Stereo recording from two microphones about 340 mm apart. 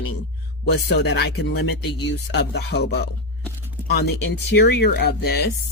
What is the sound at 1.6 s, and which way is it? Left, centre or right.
Speech, left.